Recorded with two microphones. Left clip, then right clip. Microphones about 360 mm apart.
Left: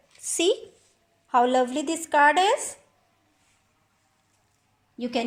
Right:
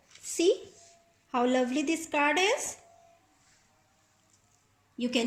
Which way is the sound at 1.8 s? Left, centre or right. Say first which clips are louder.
Left 8 dB; left.